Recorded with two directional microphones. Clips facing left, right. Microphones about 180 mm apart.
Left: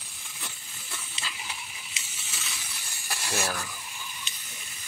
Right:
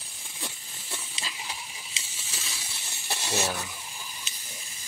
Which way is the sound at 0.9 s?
30° right (ahead or behind).